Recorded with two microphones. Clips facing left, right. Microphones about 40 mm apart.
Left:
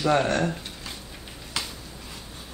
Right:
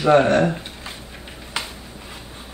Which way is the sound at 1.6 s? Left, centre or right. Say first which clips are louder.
Right 4 dB; right.